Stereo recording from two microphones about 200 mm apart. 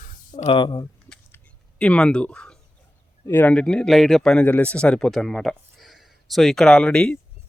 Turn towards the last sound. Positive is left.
turn(degrees=5)  # may be behind; listen again after turning